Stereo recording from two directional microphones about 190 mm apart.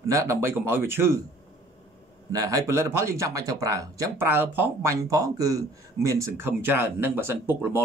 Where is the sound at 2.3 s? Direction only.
15° right (ahead or behind).